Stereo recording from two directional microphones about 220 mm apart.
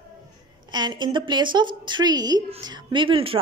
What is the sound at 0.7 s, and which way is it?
Speech, 20° right (ahead or behind).